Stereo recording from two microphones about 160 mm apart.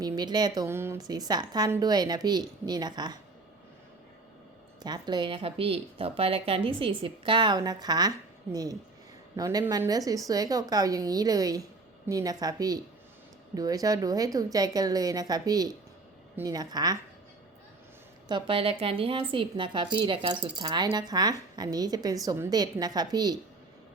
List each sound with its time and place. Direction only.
0.0 s speech: 25° right (ahead or behind)
4.8 s speech: 25° right (ahead or behind)
9.3 s speech: 20° right (ahead or behind)
18.3 s speech: 30° right (ahead or behind)